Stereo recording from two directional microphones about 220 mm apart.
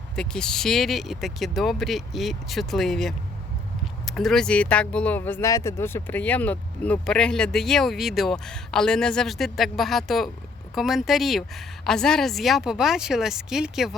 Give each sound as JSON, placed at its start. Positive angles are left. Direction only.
{"t": 0.2, "sound": "speech", "side_deg": 5}